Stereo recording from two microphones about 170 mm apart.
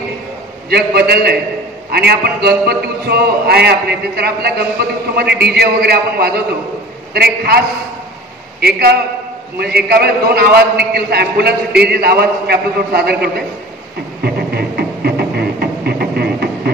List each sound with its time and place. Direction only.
0.7 s a man's voice: 70° right (ahead or behind)
14.2 s music: 70° right (ahead or behind)